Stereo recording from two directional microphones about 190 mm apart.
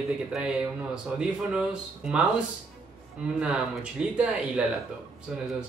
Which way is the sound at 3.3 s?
5° right (ahead or behind).